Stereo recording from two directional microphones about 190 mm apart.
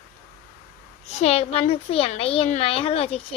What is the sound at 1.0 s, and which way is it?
A woman's voice, 35° left (ahead or behind).